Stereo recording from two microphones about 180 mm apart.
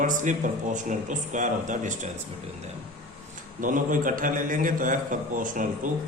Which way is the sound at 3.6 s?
45° right (ahead or behind).